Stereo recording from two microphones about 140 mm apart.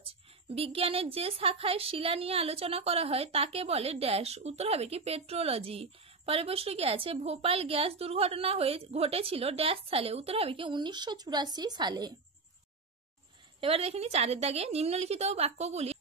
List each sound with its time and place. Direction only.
0.0 s a woman's voice: 45° right (ahead or behind)
13.6 s a woman's voice: 45° right (ahead or behind)